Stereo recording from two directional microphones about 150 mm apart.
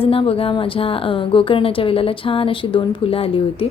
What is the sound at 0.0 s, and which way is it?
A woman's voice, 40° left (ahead or behind).